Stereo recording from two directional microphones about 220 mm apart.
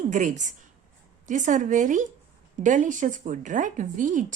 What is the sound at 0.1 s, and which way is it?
Speech, 35° right (ahead or behind).